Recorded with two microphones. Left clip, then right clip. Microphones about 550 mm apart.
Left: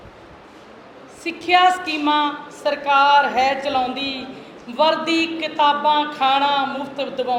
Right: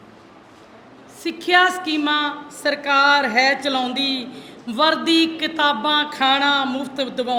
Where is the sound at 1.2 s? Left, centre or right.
Right.